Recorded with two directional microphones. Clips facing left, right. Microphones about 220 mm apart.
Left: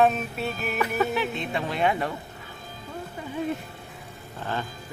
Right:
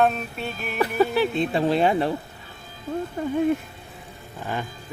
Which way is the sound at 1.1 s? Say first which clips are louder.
Right 6 dB; 35° right (ahead or behind).